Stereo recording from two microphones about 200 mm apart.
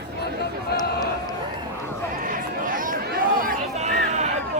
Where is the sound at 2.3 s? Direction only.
45° right (ahead or behind).